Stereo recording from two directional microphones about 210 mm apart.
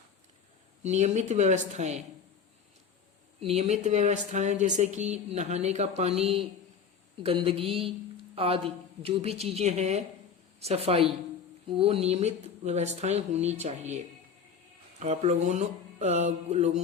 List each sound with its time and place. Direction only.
0.8 s speech: 35° right (ahead or behind)
3.4 s a woman's voice: 30° right (ahead or behind)